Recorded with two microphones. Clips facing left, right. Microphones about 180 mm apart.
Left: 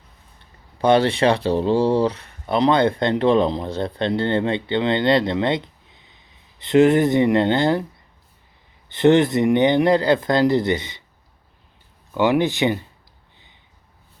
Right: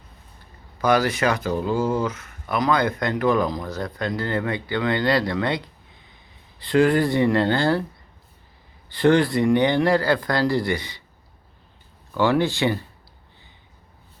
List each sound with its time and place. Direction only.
0.8 s speech: 30° left (ahead or behind)
8.9 s speech: 20° left (ahead or behind)
12.1 s speech: 20° left (ahead or behind)